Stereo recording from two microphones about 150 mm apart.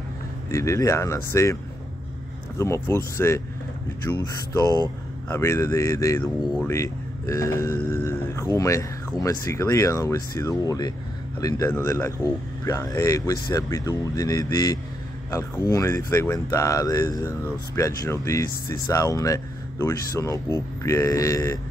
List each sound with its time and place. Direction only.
0.5 s speech: 20° left (ahead or behind)
2.6 s speech: 20° left (ahead or behind)